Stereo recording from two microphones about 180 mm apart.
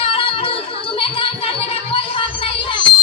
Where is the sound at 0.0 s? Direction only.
30° left (ahead or behind).